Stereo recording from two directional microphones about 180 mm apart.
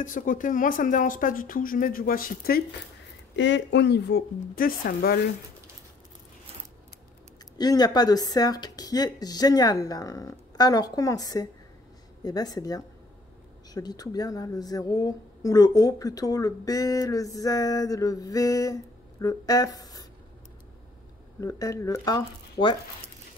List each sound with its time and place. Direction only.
0.0 s speech: 50° left (ahead or behind)
3.3 s speech: 90° left; by 5.2 s 55° left (ahead or behind)
7.5 s a woman's voice: 20° left (ahead or behind)
21.4 s a woman's voice: 20° left (ahead or behind)